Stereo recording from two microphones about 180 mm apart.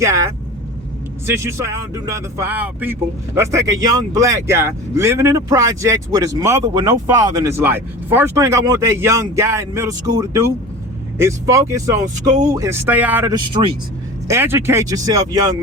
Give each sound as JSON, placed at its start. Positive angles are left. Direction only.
{"t": 0.0, "sound": "speech", "side_deg": -15}
{"t": 13.3, "sound": "speech", "side_deg": -25}
{"t": 14.3, "sound": "speech", "side_deg": -15}